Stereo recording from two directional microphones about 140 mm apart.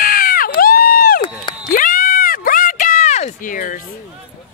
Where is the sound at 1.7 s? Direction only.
75° left (ahead or behind).